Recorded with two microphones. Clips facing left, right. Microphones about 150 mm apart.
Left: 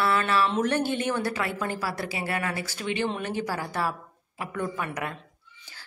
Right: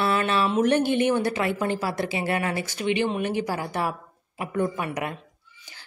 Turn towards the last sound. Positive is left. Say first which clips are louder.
# right 4 dB
turn(degrees=-15)  # may be behind; listen again after turning